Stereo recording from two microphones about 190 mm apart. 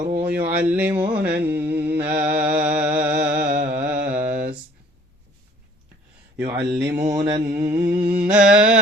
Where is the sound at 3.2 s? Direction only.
55° right (ahead or behind).